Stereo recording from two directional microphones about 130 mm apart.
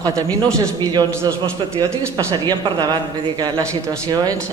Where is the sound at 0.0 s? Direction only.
25° right (ahead or behind).